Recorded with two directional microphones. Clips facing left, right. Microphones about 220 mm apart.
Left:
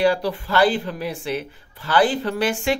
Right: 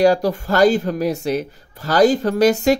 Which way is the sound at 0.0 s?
45° right (ahead or behind).